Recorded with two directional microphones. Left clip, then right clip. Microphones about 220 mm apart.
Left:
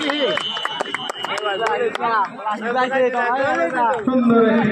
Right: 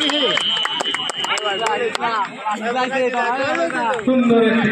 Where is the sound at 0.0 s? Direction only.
40° right (ahead or behind).